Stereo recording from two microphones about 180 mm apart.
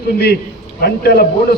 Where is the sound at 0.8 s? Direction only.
60° left (ahead or behind).